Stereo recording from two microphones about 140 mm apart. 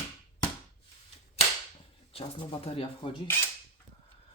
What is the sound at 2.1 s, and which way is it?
Speech, 40° left (ahead or behind).